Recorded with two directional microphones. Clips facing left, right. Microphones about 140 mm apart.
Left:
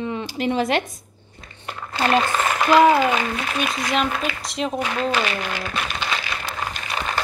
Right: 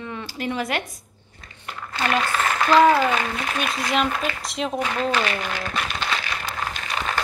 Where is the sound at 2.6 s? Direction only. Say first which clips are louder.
Left 1 dB; 10° left (ahead or behind).